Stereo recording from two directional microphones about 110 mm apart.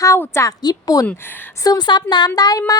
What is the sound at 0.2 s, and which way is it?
Speech, 25° left (ahead or behind).